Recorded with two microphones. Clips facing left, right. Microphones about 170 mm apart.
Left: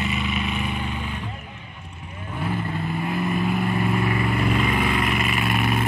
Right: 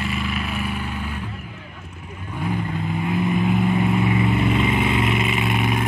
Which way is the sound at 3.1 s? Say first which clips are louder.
Right 4 dB; 20° right (ahead or behind).